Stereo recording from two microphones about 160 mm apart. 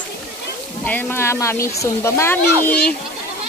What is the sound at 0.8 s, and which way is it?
Speech, 10° left (ahead or behind).